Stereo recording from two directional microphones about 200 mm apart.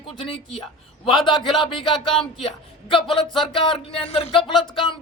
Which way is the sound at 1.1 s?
20° left (ahead or behind).